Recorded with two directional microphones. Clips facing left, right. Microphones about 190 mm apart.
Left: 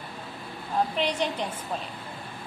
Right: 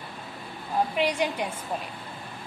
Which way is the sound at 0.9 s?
10° right (ahead or behind).